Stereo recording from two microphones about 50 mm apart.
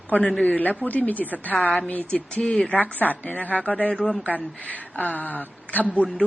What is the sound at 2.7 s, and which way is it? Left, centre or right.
A woman's voice, left.